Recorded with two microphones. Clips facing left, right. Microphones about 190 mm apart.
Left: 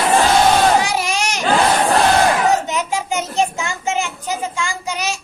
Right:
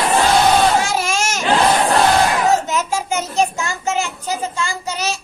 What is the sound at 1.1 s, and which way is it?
Baby cry, 45° right (ahead or behind).